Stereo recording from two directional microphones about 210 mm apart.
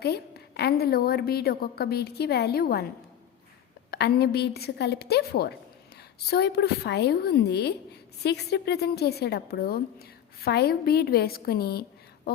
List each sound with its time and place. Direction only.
0.0 s a woman's voice: 50° left (ahead or behind)
3.9 s a woman's voice: 50° left (ahead or behind)